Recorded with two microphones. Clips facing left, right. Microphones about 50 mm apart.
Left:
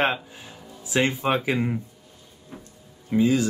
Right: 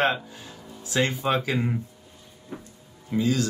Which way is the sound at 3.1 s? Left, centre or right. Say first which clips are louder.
Left 4 dB; left.